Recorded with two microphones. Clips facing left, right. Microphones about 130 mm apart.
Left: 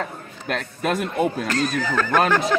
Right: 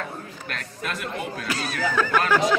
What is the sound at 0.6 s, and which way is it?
Speech, 45° left (ahead or behind).